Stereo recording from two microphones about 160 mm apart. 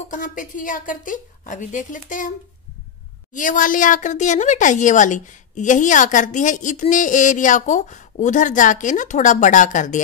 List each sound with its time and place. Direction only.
0.1 s a woman's voice: 55° left (ahead or behind)
3.3 s a woman's voice: 55° left (ahead or behind)